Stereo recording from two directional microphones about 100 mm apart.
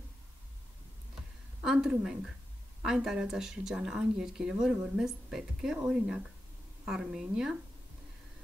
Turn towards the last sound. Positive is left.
turn(degrees=-5)  # may be behind; listen again after turning